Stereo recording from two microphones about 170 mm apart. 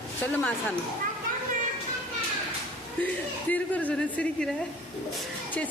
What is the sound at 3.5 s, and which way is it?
Speech, 10° left (ahead or behind).